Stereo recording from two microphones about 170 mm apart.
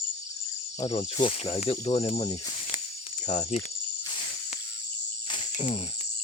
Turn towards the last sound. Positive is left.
turn(degrees=30)  # may be behind; listen again after turning